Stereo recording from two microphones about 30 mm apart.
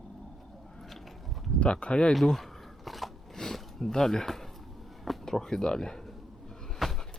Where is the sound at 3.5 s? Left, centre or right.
Centre.